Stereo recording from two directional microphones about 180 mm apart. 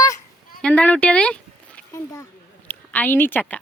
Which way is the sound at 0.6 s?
10° left (ahead or behind).